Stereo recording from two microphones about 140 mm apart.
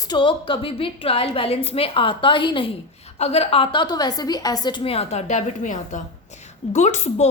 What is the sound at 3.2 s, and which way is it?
A woman's voice, 45° left (ahead or behind).